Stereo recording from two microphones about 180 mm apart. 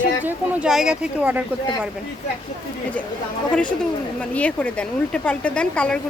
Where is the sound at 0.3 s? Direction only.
5° right (ahead or behind).